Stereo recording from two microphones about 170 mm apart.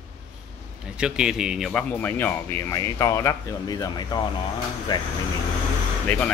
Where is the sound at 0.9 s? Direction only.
5° right (ahead or behind).